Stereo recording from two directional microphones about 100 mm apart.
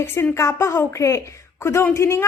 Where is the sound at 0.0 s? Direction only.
25° left (ahead or behind).